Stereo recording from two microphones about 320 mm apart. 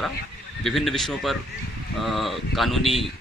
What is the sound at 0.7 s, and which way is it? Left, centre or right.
A man's voice, centre.